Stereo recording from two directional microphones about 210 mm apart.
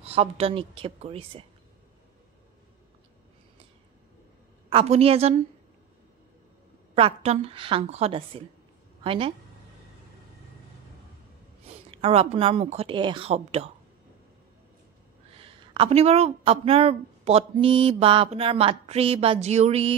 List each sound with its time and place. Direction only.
0.0 s a woman's voice: 30° right (ahead or behind)
4.6 s a woman's voice: 30° right (ahead or behind)
7.0 s a woman's voice: 25° right (ahead or behind)
11.9 s a woman's voice: 30° right (ahead or behind)
15.3 s a woman's voice: 25° right (ahead or behind)